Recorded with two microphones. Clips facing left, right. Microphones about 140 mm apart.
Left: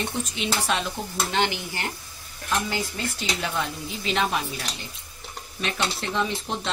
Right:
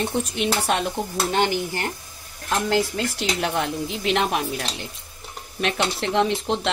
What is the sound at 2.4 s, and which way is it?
Speech, 70° right (ahead or behind).